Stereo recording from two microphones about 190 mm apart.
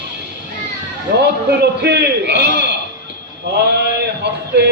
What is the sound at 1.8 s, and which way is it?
Speech, 65° right (ahead or behind).